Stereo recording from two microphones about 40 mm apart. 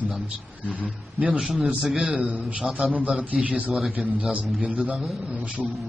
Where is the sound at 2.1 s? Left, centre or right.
Right.